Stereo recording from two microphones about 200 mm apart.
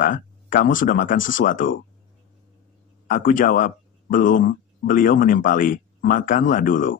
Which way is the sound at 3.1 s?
40° left (ahead or behind).